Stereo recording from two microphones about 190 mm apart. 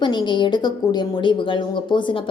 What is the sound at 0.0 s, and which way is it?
A woman's voice, 25° left (ahead or behind).